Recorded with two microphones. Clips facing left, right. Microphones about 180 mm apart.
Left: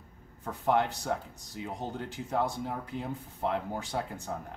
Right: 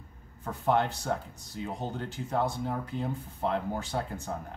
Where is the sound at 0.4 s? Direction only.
15° left (ahead or behind).